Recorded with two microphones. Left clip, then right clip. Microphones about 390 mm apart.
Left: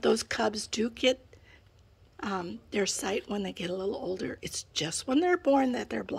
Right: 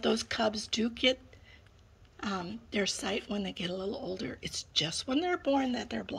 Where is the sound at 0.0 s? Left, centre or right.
Centre.